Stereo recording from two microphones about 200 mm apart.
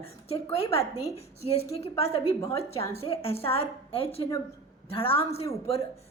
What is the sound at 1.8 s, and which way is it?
A woman's voice, 30° left (ahead or behind).